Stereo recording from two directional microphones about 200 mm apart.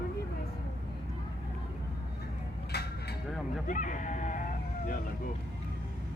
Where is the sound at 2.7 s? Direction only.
55° left (ahead or behind).